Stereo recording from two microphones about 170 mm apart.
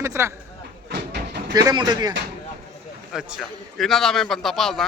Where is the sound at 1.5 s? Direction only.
20° right (ahead or behind).